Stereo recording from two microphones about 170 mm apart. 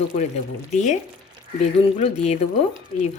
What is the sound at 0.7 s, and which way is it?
Speech, 45° left (ahead or behind).